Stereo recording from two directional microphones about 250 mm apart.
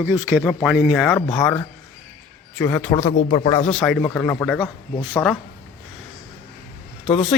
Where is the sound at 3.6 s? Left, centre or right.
Centre.